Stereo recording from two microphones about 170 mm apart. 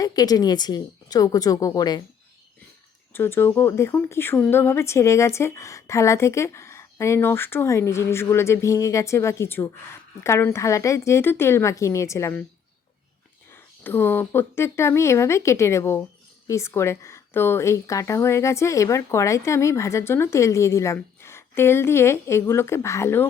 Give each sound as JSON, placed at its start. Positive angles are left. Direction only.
{"t": 0.0, "sound": "speech", "side_deg": 20}
{"t": 3.1, "sound": "speech", "side_deg": 15}
{"t": 13.8, "sound": "speech", "side_deg": 10}